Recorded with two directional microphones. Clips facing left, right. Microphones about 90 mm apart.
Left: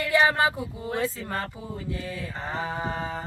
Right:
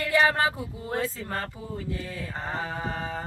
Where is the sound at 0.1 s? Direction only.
20° left (ahead or behind).